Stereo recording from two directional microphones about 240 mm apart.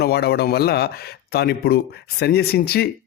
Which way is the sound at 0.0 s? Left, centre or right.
Left.